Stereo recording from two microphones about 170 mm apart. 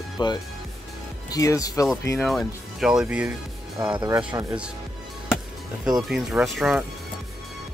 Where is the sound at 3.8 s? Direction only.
25° right (ahead or behind).